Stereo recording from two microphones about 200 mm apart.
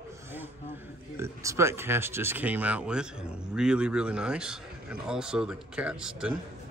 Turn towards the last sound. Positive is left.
turn(degrees=-5)  # may be behind; listen again after turning